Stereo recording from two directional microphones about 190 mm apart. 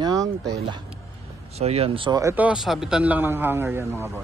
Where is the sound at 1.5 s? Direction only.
35° right (ahead or behind); by 4.1 s 10° right (ahead or behind).